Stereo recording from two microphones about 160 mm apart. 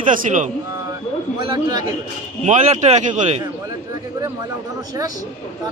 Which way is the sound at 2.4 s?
45° right (ahead or behind).